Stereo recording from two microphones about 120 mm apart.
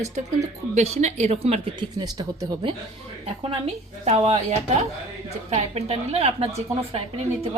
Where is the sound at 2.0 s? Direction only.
35° right (ahead or behind).